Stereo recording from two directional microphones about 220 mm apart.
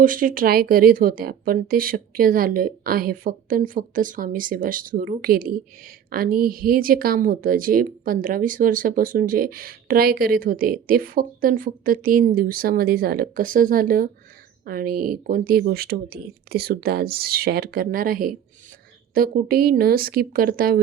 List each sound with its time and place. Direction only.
0.0 s a woman's voice: 40° right (ahead or behind)